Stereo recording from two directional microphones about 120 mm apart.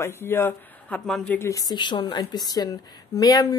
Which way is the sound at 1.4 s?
30° left (ahead or behind).